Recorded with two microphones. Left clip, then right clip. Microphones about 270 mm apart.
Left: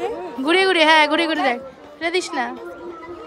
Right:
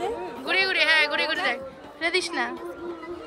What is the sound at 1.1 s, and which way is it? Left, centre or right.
A woman's voice, left.